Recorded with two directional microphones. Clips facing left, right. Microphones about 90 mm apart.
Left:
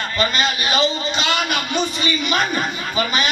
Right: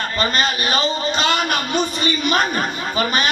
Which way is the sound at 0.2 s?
40° right (ahead or behind).